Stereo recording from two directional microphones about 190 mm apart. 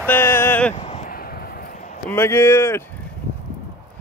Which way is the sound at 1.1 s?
50° left (ahead or behind).